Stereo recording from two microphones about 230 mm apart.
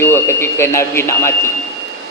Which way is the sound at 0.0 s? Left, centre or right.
Centre.